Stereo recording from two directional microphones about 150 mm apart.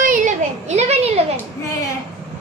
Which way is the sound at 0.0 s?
60° right (ahead or behind).